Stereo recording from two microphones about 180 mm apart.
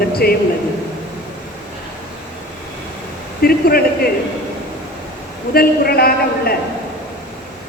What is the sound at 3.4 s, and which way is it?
Speech, 55° left (ahead or behind).